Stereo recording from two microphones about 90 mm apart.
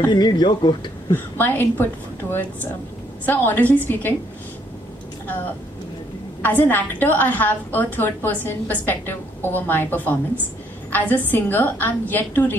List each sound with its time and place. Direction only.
0.1 s speech: 50° left (ahead or behind)
1.1 s a woman's voice: 20° left (ahead or behind)
3.3 s a woman's voice: 20° left (ahead or behind)
6.4 s a woman's voice: 20° left (ahead or behind)